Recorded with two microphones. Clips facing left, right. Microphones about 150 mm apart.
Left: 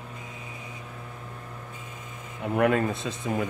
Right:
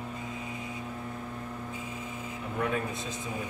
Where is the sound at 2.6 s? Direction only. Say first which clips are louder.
Left 8 dB; 85° left.